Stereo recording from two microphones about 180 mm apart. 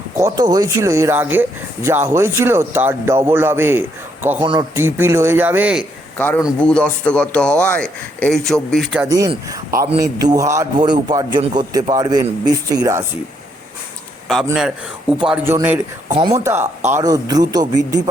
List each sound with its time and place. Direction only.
0.2 s speech: 20° right (ahead or behind)
6.1 s a man's voice: 10° left (ahead or behind)
9.1 s a man's voice: 20° right (ahead or behind)
15.2 s a man's voice: 5° right (ahead or behind)
15.5 s a man's voice: 15° right (ahead or behind)